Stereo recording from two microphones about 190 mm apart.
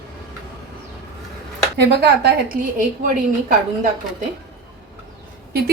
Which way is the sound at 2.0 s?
55° right (ahead or behind).